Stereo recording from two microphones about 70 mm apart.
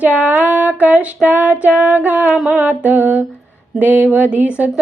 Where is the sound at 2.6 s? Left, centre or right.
Centre.